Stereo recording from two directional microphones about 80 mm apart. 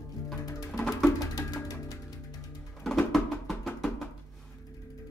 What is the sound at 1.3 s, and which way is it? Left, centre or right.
Music, left.